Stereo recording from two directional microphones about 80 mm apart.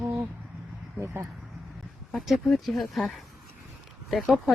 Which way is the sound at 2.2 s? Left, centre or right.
Centre.